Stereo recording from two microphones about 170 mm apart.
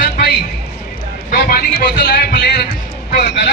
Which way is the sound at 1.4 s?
75° left (ahead or behind).